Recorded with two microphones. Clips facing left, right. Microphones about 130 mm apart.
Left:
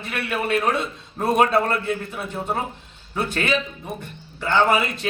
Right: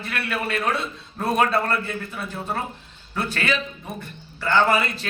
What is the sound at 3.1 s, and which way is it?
Speech, 15° left (ahead or behind).